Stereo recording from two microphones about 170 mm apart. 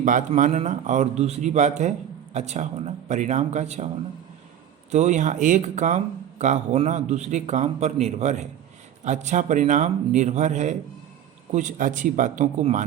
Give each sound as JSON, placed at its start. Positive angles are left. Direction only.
{"t": 0.0, "sound": "a man's voice", "side_deg": -50}
{"t": 4.9, "sound": "a man's voice", "side_deg": -45}